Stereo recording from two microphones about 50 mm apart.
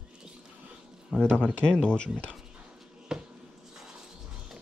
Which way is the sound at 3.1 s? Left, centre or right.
Centre.